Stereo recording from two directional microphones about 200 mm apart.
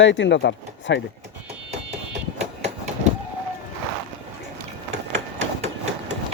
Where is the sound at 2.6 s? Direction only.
35° right (ahead or behind).